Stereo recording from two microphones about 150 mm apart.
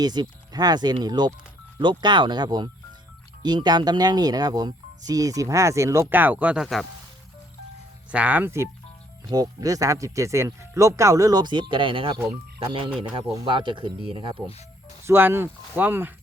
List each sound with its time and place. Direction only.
0.0 s speech: 25° right (ahead or behind); by 6.8 s centre (ahead or behind)
8.1 s speech: 10° right (ahead or behind); by 14.3 s 35° right (ahead or behind)
15.0 s speech: 15° right (ahead or behind)